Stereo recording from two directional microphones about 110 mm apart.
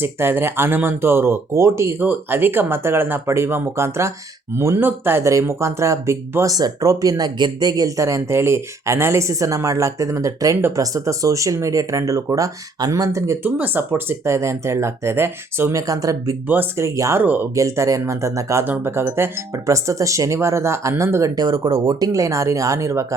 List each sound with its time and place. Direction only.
0.0 s speech: 20° right (ahead or behind)
13.4 s speech: 15° right (ahead or behind); by 16.3 s 30° right (ahead or behind)
16.5 s speech: 20° right (ahead or behind)
17.2 s speech: 15° right (ahead or behind)
17.5 s speech: 30° right (ahead or behind)
18.6 s speech: 15° right (ahead or behind)